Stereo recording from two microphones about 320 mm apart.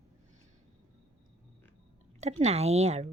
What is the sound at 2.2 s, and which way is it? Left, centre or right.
Speech, centre.